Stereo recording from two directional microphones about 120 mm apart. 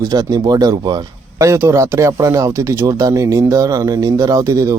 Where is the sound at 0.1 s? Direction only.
30° right (ahead or behind).